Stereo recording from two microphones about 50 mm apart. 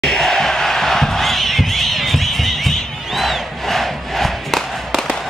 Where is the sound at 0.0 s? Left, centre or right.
Centre.